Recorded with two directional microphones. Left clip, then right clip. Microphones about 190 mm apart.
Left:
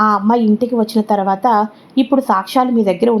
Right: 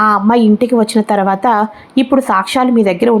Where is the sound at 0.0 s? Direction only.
20° right (ahead or behind).